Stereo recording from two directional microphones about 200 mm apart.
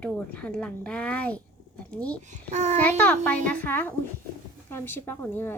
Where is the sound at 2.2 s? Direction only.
35° right (ahead or behind).